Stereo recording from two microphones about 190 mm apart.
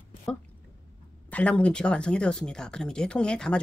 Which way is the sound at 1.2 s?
5° left (ahead or behind).